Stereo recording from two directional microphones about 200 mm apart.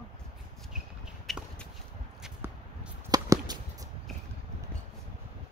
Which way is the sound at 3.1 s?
20° right (ahead or behind).